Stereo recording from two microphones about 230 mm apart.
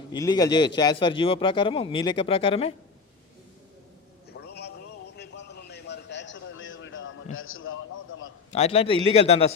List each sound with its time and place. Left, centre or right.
0.1 s a man's voice: centre
4.3 s vehicle: left
5.1 s a sound: left
8.5 s speech: left